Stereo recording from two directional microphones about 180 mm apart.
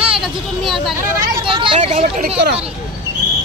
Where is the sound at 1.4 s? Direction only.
30° right (ahead or behind).